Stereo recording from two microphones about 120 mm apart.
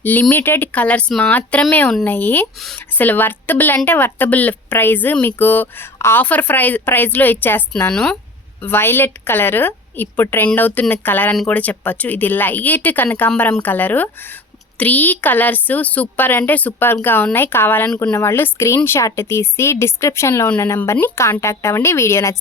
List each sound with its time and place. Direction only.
0.0 s speech: 15° left (ahead or behind)